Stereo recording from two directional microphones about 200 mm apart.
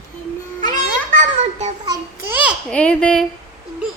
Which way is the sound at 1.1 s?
35° right (ahead or behind).